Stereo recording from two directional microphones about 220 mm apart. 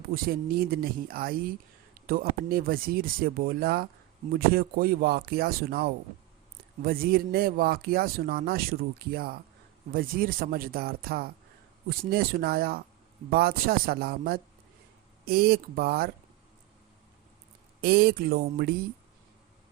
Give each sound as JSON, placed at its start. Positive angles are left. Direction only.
{"t": 0.1, "sound": "speech", "side_deg": -40}
{"t": 17.7, "sound": "speech", "side_deg": -45}